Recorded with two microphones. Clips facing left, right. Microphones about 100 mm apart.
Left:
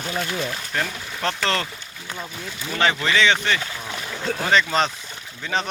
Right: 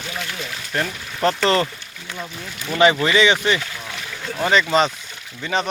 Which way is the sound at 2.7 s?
10° right (ahead or behind).